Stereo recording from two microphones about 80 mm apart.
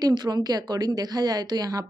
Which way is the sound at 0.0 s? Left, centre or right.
Right.